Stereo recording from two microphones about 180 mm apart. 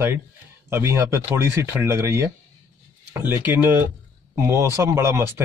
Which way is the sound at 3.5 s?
10° right (ahead or behind).